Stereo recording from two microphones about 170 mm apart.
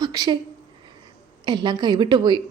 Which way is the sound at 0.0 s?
20° right (ahead or behind).